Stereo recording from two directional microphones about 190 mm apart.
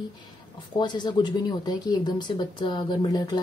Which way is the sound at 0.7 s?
25° left (ahead or behind).